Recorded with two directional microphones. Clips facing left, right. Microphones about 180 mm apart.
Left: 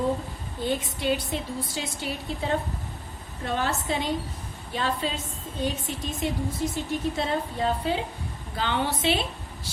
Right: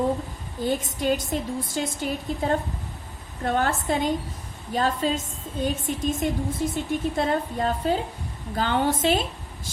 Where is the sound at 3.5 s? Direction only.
50° right (ahead or behind).